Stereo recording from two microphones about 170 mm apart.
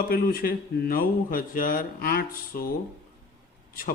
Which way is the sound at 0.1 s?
60° left (ahead or behind).